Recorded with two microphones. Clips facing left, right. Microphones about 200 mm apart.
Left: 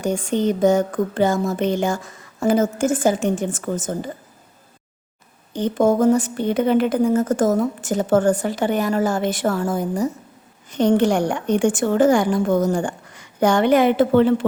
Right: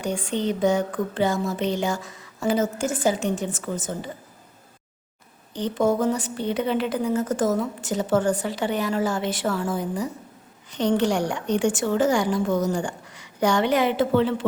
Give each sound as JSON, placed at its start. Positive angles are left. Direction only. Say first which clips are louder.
{"t": 0.0, "sound": "a woman's voice", "louder": "left 5 dB", "side_deg": 45}
{"t": 5.5, "sound": "a woman's voice", "louder": "left 5 dB", "side_deg": 50}